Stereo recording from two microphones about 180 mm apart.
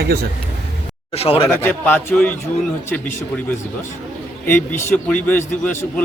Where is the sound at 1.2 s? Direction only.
30° left (ahead or behind).